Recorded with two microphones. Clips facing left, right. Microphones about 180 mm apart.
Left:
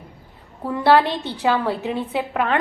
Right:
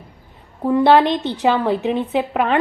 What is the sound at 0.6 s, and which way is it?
A woman's voice, 20° right (ahead or behind).